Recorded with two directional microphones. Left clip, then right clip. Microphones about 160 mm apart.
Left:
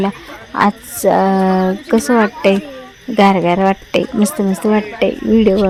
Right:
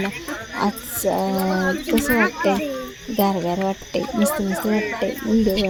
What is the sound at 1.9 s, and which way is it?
Speech, 35° left (ahead or behind).